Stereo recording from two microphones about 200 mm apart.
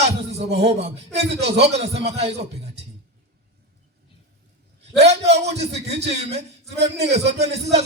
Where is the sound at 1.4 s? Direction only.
60° right (ahead or behind).